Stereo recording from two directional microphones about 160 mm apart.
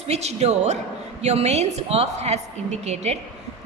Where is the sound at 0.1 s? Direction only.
45° right (ahead or behind).